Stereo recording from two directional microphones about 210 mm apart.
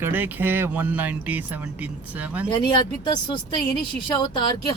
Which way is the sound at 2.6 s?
20° left (ahead or behind).